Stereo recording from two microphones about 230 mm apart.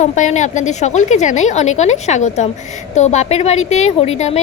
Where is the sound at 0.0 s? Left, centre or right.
Left.